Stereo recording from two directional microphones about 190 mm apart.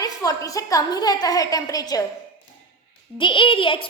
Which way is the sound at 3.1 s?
25° left (ahead or behind).